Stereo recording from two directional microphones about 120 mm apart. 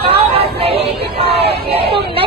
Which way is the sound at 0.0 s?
55° right (ahead or behind).